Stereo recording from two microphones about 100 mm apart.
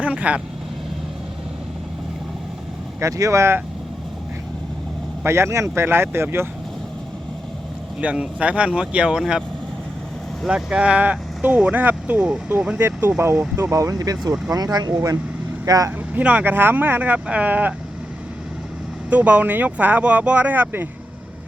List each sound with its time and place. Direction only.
0.0 s speech: 15° right (ahead or behind)
3.0 s speech: 35° right (ahead or behind)
5.2 s speech: 25° right (ahead or behind)
8.0 s speech: 10° right (ahead or behind)
10.4 s speech: 10° right (ahead or behind); by 15.9 s 40° right (ahead or behind)
16.1 s speech: 15° right (ahead or behind)
19.1 s speech: 15° right (ahead or behind)